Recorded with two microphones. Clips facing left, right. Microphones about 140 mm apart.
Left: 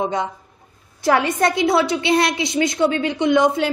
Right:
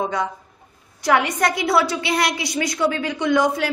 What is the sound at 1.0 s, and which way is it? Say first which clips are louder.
A woman's voice: left 2 dB; 25° left (ahead or behind).